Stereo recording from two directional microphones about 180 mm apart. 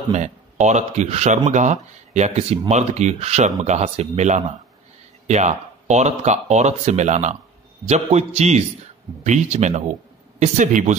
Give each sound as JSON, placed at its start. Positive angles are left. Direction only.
{"t": 0.1, "sound": "speech", "side_deg": -40}